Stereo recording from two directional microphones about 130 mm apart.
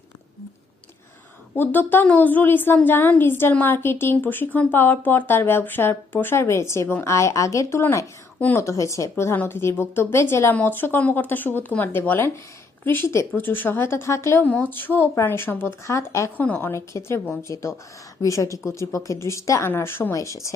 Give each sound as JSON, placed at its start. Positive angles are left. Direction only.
{"t": 1.5, "sound": "a woman's voice", "side_deg": 15}